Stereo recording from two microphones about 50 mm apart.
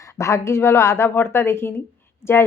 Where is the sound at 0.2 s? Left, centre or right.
Left.